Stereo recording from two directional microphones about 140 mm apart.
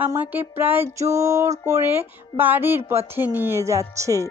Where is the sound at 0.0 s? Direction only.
15° right (ahead or behind).